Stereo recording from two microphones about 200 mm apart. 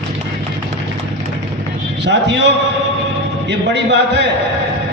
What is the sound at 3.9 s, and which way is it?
Speech, 55° right (ahead or behind).